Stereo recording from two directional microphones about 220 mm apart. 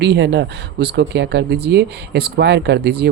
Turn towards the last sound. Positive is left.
turn(degrees=-50)  # may be behind; listen again after turning